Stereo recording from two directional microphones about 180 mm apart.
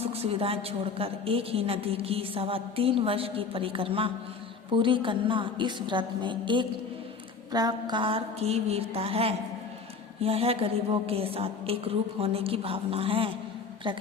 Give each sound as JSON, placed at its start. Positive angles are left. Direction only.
{"t": 0.0, "sound": "a woman's voice", "side_deg": -35}